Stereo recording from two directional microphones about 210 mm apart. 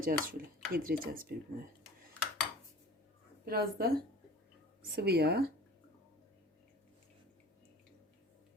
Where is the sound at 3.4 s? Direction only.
45° right (ahead or behind).